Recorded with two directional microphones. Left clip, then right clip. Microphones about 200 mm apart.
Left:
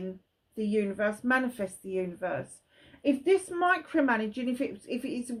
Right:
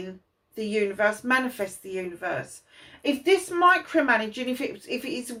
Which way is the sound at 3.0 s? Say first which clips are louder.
Right 3 dB; 45° left (ahead or behind).